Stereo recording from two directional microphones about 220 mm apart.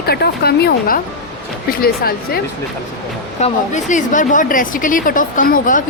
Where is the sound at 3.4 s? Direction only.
35° left (ahead or behind).